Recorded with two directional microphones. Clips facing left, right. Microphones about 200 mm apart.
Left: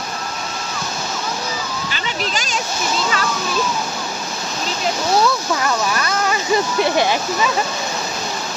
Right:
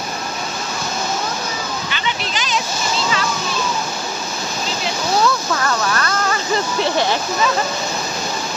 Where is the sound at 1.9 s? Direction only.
40° left (ahead or behind).